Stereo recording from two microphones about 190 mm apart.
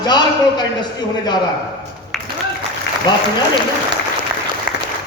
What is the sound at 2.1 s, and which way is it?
Applause, centre (ahead or behind).